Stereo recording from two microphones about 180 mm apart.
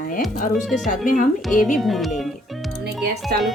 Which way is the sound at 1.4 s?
Centre (ahead or behind).